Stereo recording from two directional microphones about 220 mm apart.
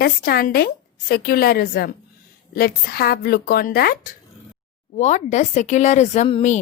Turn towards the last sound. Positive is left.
turn(degrees=30)  # may be behind; listen again after turning